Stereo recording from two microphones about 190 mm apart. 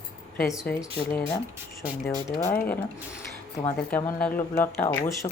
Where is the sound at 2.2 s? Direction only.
15° left (ahead or behind).